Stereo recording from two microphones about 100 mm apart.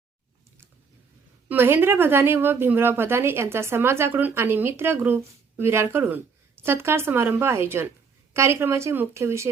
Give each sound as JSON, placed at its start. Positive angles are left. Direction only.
{"t": 1.5, "sound": "a woman's voice", "side_deg": -20}